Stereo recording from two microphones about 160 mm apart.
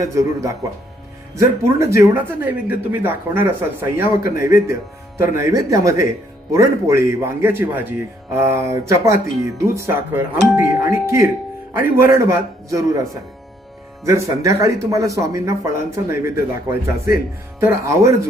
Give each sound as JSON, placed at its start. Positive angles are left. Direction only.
{"t": 0.0, "sound": "speech", "side_deg": -20}
{"t": 1.6, "sound": "speech", "side_deg": -15}